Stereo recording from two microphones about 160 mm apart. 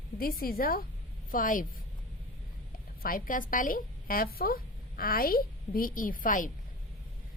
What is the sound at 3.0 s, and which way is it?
A woman's voice, 60° left (ahead or behind).